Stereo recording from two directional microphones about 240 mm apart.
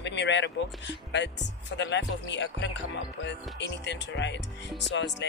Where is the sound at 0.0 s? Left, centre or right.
Left.